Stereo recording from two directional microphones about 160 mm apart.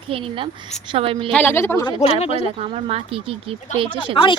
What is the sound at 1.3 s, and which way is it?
Speech, 10° left (ahead or behind).